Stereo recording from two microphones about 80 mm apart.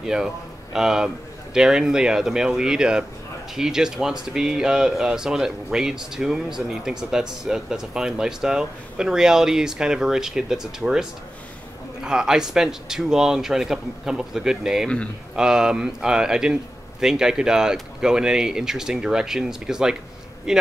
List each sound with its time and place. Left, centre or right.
0.0 s a man's voice: centre